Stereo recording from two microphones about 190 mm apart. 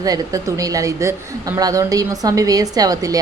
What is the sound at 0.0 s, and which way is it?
A woman's voice, 20° right (ahead or behind).